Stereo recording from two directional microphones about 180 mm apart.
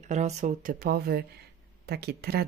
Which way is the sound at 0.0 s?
40° right (ahead or behind).